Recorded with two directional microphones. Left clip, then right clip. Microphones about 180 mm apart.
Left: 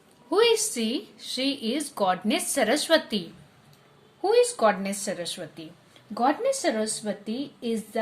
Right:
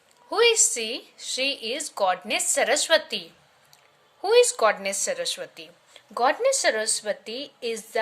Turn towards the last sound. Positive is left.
turn(degrees=-35)  # may be behind; listen again after turning